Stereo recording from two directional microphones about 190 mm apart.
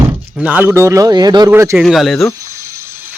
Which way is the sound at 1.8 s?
Centre (ahead or behind).